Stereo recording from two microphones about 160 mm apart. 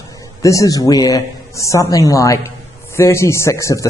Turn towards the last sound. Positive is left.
turn(degrees=20)  # may be behind; listen again after turning